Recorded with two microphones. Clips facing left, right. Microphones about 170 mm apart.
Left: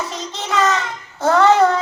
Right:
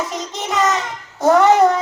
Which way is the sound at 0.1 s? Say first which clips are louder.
Right 1 dB; 15° right (ahead or behind).